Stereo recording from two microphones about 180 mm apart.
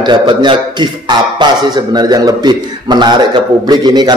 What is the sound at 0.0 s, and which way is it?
A man's voice, 25° right (ahead or behind).